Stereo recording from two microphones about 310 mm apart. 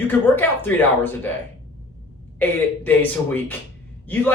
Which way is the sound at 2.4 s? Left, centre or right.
Centre.